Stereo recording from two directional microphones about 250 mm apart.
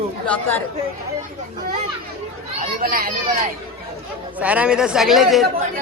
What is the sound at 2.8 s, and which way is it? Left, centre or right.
Speech, right.